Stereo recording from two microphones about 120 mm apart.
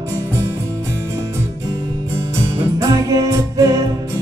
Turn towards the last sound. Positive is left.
turn(degrees=-25)  # may be behind; listen again after turning